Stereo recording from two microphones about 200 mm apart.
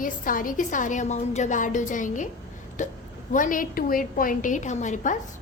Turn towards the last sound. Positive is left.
turn(degrees=35)  # may be behind; listen again after turning